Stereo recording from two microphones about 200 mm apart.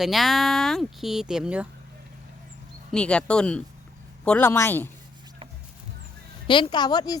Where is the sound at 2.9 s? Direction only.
5° left (ahead or behind).